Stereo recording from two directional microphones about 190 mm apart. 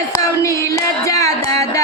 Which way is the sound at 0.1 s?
15° left (ahead or behind).